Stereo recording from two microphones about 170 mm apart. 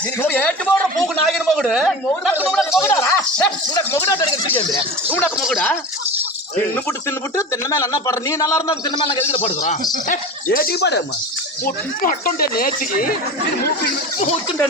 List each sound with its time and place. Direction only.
0.2 s a man's voice: 10° left (ahead or behind)
2.8 s a sound: 15° left (ahead or behind)
5.5 s a man's voice: 10° left (ahead or behind)
9.3 s speech: 40° left (ahead or behind)
10.1 s speech: 60° left (ahead or behind); by 11.0 s 75° left (ahead or behind)
11.6 s speech: 55° left (ahead or behind)